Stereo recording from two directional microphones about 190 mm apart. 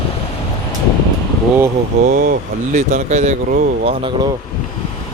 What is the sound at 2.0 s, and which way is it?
Speech, 50° right (ahead or behind).